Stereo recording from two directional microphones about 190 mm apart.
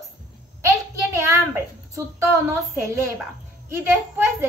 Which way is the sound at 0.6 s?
15° right (ahead or behind).